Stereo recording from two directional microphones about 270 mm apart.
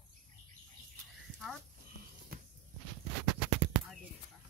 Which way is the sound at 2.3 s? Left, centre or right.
Right.